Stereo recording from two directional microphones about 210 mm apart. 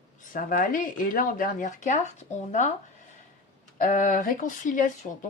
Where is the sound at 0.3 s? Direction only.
40° left (ahead or behind).